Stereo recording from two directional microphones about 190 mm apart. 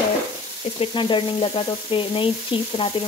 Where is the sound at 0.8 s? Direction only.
25° left (ahead or behind).